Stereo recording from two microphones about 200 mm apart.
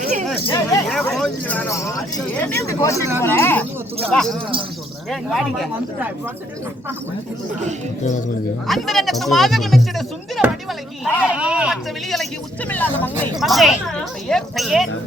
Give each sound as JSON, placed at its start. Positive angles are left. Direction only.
{"t": 0.0, "sound": "a sound", "side_deg": -35}
{"t": 0.4, "sound": "speech", "side_deg": 25}
{"t": 0.9, "sound": "speech", "side_deg": 0}
{"t": 8.6, "sound": "speech", "side_deg": 0}
{"t": 11.3, "sound": "speech", "side_deg": -5}